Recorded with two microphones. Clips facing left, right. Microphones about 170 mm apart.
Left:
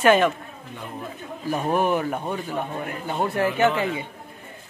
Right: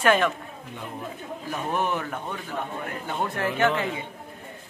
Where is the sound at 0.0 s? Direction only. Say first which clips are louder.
Left 4 dB; centre (ahead or behind).